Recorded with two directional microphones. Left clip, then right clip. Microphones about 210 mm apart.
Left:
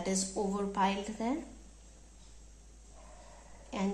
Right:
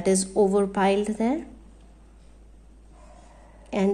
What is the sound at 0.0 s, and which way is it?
A woman's voice, 55° right (ahead or behind).